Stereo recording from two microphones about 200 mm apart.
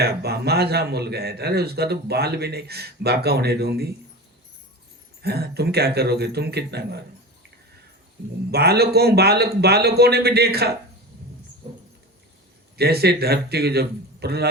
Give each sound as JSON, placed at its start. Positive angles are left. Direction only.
{"t": 0.0, "sound": "a man's voice", "side_deg": -55}
{"t": 5.2, "sound": "speech", "side_deg": -55}
{"t": 8.4, "sound": "a man's voice", "side_deg": -55}
{"t": 12.7, "sound": "a man's voice", "side_deg": -55}